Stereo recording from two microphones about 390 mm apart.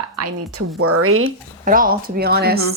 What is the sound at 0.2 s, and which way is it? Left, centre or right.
A woman's voice, right.